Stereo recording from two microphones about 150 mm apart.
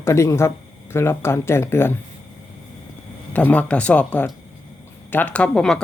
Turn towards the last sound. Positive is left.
turn(degrees=5)  # may be behind; listen again after turning